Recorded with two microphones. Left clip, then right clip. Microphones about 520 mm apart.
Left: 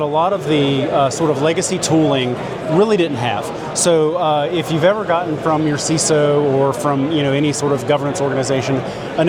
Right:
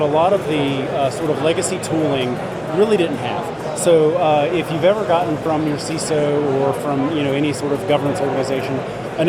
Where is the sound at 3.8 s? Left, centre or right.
Left.